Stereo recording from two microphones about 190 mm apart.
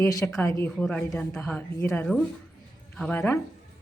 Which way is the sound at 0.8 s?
5° left (ahead or behind).